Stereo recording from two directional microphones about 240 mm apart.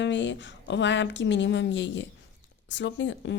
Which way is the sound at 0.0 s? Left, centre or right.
Left.